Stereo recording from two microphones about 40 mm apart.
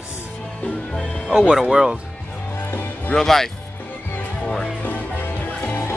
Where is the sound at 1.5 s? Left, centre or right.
Centre.